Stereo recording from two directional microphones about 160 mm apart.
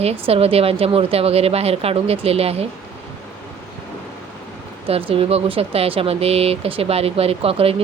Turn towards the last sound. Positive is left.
turn(degrees=-35)  # may be behind; listen again after turning